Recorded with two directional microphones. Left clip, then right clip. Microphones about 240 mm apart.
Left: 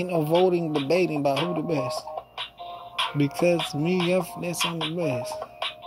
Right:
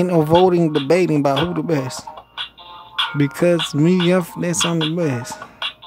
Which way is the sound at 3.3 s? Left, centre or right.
Centre.